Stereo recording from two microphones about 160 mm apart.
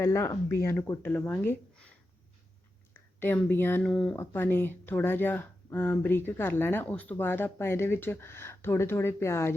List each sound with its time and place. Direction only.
0.0 s speech: 20° left (ahead or behind)
3.2 s speech: 15° left (ahead or behind)